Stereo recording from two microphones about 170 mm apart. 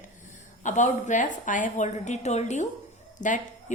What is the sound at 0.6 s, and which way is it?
A woman's voice, 45° left (ahead or behind).